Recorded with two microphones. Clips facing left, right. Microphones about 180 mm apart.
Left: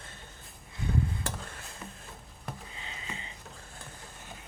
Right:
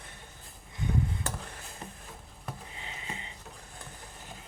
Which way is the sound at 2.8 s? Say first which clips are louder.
Right 1 dB; 20° right (ahead or behind).